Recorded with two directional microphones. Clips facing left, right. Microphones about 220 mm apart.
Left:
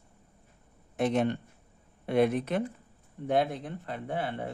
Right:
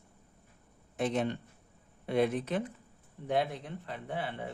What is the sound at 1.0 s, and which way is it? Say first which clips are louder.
A man's voice: left 4 dB; 60° left (ahead or behind).